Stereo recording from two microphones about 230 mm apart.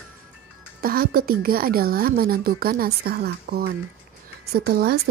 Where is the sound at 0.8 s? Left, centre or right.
Right.